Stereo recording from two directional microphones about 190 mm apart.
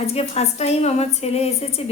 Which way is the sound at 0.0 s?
35° left (ahead or behind).